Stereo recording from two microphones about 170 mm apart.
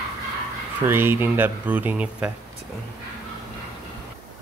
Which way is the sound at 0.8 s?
15° right (ahead or behind).